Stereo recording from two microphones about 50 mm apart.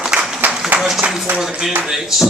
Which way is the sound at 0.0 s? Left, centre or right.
Centre.